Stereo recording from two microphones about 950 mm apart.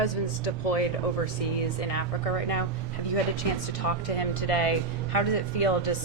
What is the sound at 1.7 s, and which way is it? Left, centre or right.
Speech, left.